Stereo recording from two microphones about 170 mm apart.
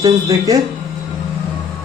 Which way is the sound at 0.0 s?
20° right (ahead or behind).